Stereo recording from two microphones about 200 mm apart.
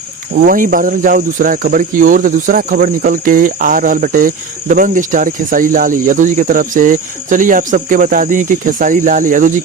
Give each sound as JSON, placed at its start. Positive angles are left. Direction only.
{"t": 0.3, "sound": "speech", "side_deg": -45}